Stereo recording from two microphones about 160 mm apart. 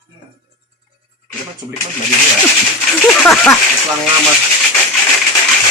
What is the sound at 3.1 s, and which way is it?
Speech, 5° left (ahead or behind).